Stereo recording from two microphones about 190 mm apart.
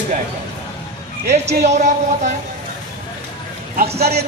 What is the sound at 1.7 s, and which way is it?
Speech, 40° right (ahead or behind).